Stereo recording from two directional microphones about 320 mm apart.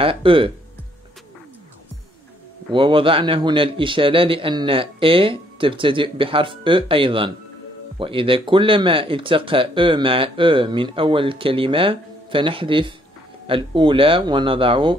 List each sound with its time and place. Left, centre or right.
0.0 s speech: centre
2.7 s speech: centre